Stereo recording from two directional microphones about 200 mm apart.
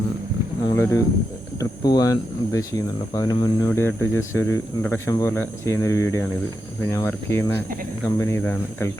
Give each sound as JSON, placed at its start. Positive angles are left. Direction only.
{"t": 0.6, "sound": "speech", "side_deg": 15}